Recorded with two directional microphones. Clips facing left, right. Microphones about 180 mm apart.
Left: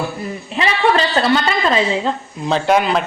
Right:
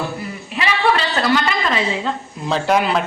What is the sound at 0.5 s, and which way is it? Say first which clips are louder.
A woman's voice: left 2 dB; 30° left (ahead or behind).